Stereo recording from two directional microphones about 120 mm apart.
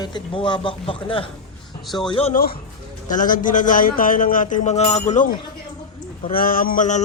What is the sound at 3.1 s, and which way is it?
A man's voice, 90° left.